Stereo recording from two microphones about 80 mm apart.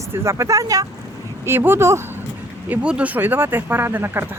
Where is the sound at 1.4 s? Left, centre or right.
Right.